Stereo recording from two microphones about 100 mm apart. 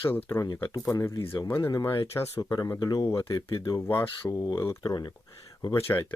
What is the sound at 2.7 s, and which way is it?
Speech, 45° left (ahead or behind).